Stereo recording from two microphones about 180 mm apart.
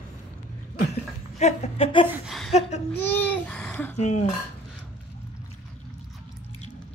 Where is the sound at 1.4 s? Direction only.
35° left (ahead or behind).